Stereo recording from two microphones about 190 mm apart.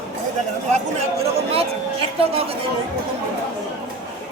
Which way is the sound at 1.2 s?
30° right (ahead or behind).